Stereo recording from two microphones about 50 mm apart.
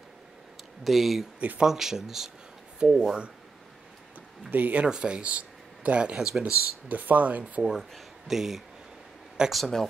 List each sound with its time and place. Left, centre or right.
0.8 s speech: centre
4.5 s speech: right
4.8 s speech: centre
6.1 s speech: centre
6.9 s speech: right
7.7 s speech: centre